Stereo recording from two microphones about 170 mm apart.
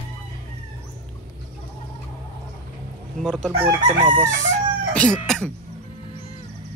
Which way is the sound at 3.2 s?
Centre (ahead or behind).